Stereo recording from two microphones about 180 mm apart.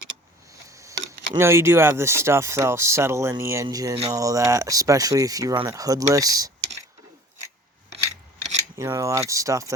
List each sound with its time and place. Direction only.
1.3 s speech: 15° right (ahead or behind)
8.8 s speech: 15° right (ahead or behind)